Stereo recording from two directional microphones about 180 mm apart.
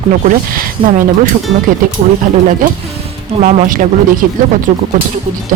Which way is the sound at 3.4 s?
45° right (ahead or behind).